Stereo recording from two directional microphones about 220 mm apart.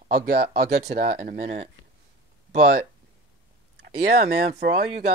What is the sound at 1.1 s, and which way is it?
Speech, 30° right (ahead or behind).